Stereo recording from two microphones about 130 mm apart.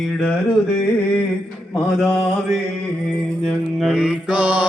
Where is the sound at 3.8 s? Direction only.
5° right (ahead or behind).